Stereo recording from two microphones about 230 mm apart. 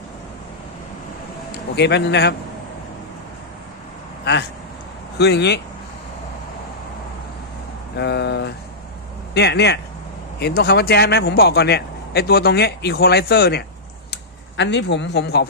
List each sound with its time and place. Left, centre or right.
1.7 s a man's voice: left
5.1 s a man's voice: left
7.9 s a man's voice: left